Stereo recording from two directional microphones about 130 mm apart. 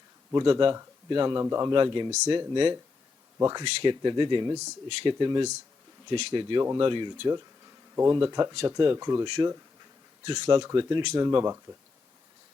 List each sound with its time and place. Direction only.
0.3 s a man's voice: 35° right (ahead or behind)
1.7 s a man's voice: 35° right (ahead or behind)
3.8 s a man's voice: 35° right (ahead or behind)
7.9 s a man's voice: 20° right (ahead or behind)